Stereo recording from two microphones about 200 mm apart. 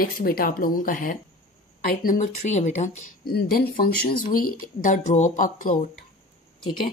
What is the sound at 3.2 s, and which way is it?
Speech, 50° left (ahead or behind).